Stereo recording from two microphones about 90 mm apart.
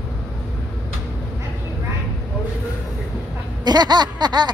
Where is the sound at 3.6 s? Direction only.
50° right (ahead or behind).